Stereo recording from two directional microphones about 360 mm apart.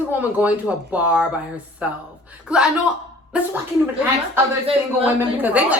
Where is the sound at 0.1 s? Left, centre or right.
Centre.